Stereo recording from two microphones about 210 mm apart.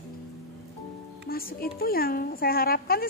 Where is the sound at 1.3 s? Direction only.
45° left (ahead or behind).